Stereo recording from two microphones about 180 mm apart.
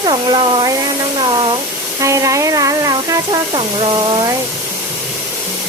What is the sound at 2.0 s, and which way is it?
Speech, 15° right (ahead or behind).